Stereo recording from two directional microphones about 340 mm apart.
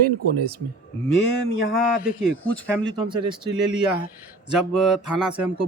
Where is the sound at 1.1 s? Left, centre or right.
Left.